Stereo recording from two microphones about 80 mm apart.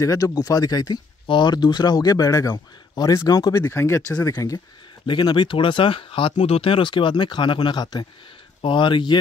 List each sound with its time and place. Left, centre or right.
0.0 s speech: left
1.2 s speech: left
3.5 s speech: left
4.1 s speech: left
5.0 s speech: left
8.6 s speech: left